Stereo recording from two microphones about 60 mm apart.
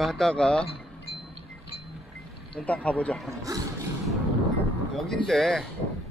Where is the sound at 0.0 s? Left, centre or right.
Centre.